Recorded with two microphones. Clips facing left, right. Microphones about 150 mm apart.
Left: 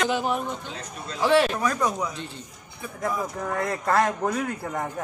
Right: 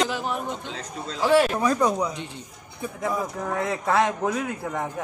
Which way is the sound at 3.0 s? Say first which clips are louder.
Even; centre (ahead or behind).